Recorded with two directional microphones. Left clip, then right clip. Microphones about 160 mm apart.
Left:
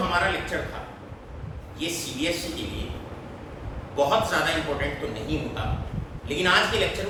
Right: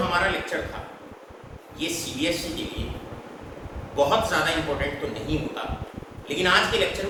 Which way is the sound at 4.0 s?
10° right (ahead or behind).